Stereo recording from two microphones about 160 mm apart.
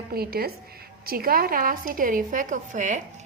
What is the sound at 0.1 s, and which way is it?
A woman's voice, 75° right (ahead or behind).